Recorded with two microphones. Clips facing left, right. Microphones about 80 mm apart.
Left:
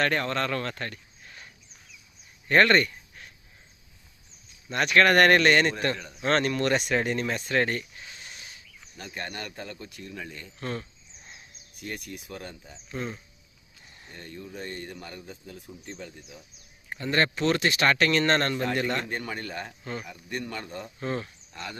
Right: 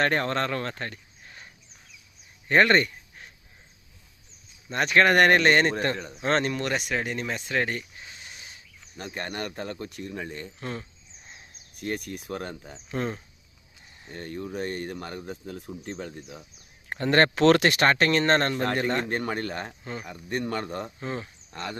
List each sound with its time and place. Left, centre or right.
0.0 s speech: right
2.5 s a sound: centre
4.7 s a man's voice: right
6.5 s speech: centre
7.9 s a sound: centre
9.0 s speech: right
10.0 s speech: right
10.6 s speech: centre
11.8 s speech: right
17.7 s speech: right
19.8 s speech: centre
20.1 s speech: right
21.0 s speech: centre
21.5 s speech: right